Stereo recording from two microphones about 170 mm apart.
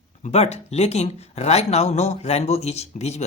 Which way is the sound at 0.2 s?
40° left (ahead or behind).